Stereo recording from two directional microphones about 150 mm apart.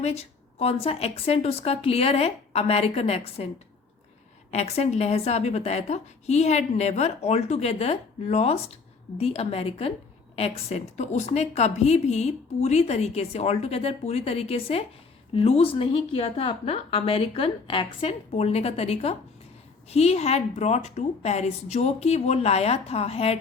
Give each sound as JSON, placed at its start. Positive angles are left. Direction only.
{"t": 0.0, "sound": "a woman's voice", "side_deg": 45}
{"t": 4.5, "sound": "a woman's voice", "side_deg": 45}